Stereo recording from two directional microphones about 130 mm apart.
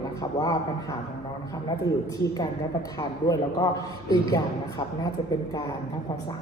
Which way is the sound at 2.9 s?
25° left (ahead or behind).